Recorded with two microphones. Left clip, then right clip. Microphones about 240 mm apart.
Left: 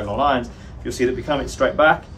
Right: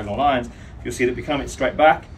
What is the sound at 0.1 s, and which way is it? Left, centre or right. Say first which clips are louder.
Speech: even; centre.